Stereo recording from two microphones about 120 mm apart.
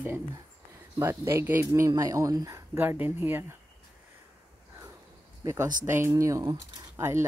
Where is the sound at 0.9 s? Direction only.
20° right (ahead or behind).